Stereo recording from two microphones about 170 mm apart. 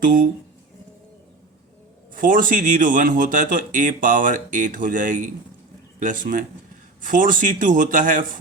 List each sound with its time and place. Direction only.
2.1 s speech: 50° right (ahead or behind)